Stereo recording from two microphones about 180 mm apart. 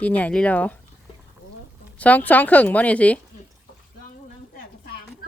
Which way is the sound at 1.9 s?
10° left (ahead or behind).